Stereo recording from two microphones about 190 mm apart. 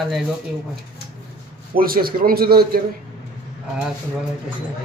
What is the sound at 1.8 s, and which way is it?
A man's voice, 50° right (ahead or behind).